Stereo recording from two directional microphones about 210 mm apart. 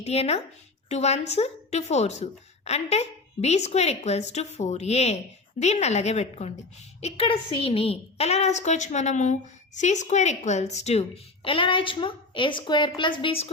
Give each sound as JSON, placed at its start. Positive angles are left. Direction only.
{"t": 0.0, "sound": "a woman's voice", "side_deg": 30}